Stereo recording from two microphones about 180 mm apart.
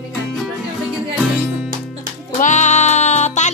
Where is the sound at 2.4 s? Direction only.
40° left (ahead or behind).